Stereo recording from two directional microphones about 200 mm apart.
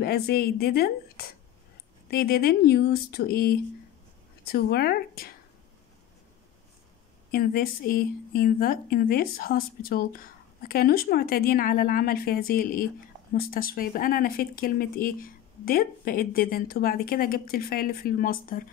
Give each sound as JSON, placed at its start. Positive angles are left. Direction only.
{"t": 0.0, "sound": "a woman's voice", "side_deg": 50}
{"t": 7.2, "sound": "a woman's voice", "side_deg": 45}